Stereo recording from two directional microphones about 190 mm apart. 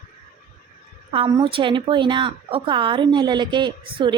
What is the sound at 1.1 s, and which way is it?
A woman's voice, 30° right (ahead or behind).